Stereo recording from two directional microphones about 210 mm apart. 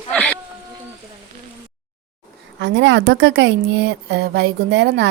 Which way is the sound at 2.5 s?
60° right (ahead or behind).